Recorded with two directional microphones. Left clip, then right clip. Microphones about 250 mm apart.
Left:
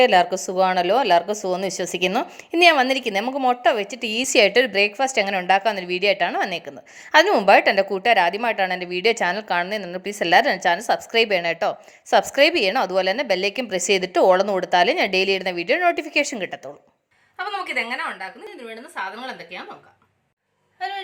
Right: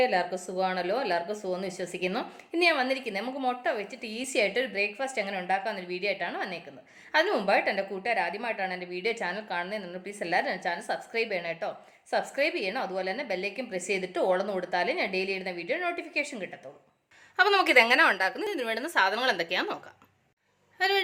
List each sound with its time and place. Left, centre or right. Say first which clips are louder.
0.0 s a woman's voice: left 10 dB; left
17.3 s a woman's voice: right 5 dB; right
20.7 s a woman's voice: right 3 dB; right